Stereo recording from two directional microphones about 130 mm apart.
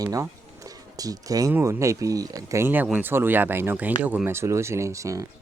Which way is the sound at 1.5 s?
25° right (ahead or behind).